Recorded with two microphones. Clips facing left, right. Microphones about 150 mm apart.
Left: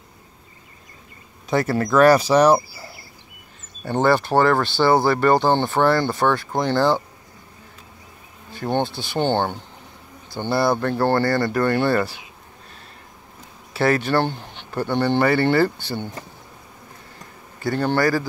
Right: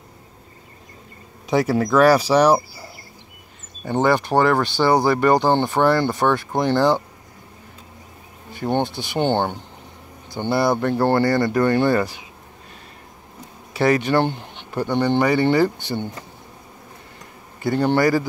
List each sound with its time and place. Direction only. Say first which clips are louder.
1.5 s speech: right 2 dB; 10° right (ahead or behind)
3.8 s speech: even; 15° right (ahead or behind)
8.5 s speech: right 1 dB; 15° right (ahead or behind)
13.7 s speech: right 1 dB; 15° right (ahead or behind)
17.6 s speech: right 2 dB; 20° right (ahead or behind)